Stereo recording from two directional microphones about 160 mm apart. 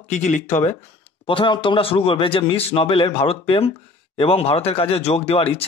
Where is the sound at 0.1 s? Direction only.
50° left (ahead or behind).